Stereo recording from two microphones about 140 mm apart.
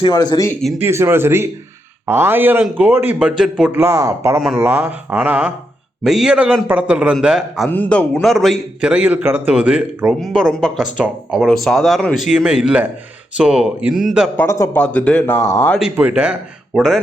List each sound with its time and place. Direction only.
0.0 s speech: 30° left (ahead or behind)
0.8 s speech: 20° right (ahead or behind)
3.8 s speech: 20° right (ahead or behind)
4.4 s speech: 5° right (ahead or behind)
7.7 s speech: 10° left (ahead or behind)
14.3 s speech: 20° left (ahead or behind)
14.7 s speech: 10° left (ahead or behind)
15.4 s speech: 20° left (ahead or behind)
15.8 s speech: 10° right (ahead or behind)